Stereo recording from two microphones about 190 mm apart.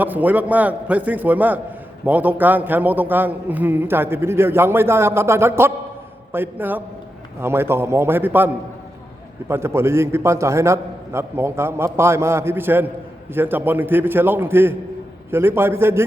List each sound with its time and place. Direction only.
0.0 s a man's voice: 10° right (ahead or behind)
9.5 s a man's voice: 15° right (ahead or behind)